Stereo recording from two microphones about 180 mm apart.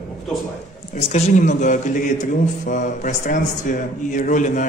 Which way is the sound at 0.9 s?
35° left (ahead or behind).